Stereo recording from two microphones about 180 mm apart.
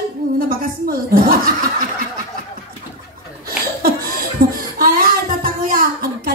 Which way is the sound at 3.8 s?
55° right (ahead or behind).